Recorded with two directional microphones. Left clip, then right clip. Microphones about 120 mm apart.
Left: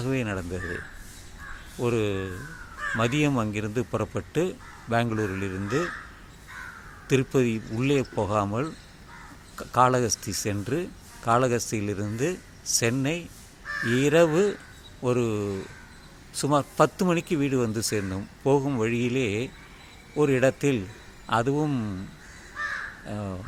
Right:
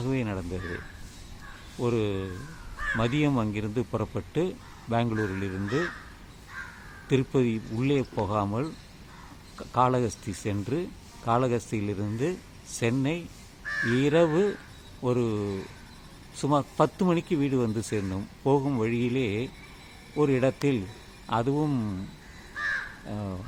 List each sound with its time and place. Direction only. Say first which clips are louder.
0.0 s speech: left 2 dB; 20° left (ahead or behind)
1.8 s speech: left 2 dB; 25° left (ahead or behind)
7.1 s speech: left 2 dB; 20° left (ahead or behind)
22.6 s crow: right 1 dB; 55° right (ahead or behind)
23.0 s speech: left 2 dB; 30° left (ahead or behind)